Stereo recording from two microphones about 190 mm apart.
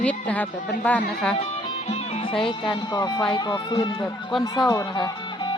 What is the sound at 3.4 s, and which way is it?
Speech, 20° left (ahead or behind).